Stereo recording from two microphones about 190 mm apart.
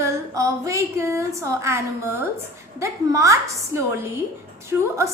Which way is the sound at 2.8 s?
15° right (ahead or behind).